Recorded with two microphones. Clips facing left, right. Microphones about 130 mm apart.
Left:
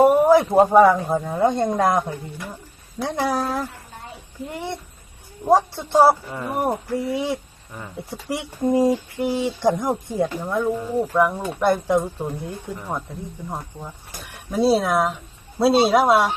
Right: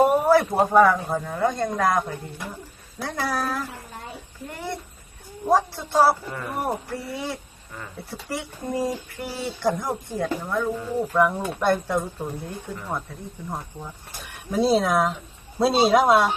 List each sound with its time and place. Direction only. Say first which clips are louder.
0.0 s a sound: left 4 dB; 20° left (ahead or behind)
1.0 s speech: left 4 dB; 25° left (ahead or behind)
5.5 s speech: left 3 dB; 25° left (ahead or behind)
11.2 s speech: left 1 dB; 5° left (ahead or behind)
14.5 s speech: left 2 dB; 5° left (ahead or behind)